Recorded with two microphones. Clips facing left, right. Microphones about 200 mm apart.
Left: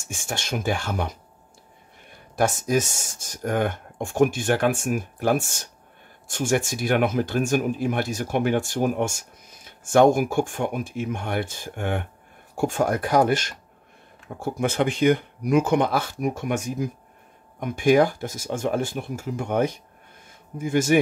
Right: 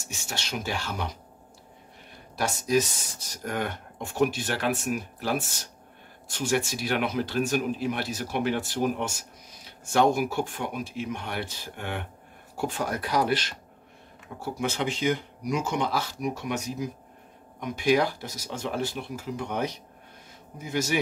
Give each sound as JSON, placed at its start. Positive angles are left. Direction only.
{"t": 0.0, "sound": "speech", "side_deg": 50}
{"t": 2.3, "sound": "speech", "side_deg": 50}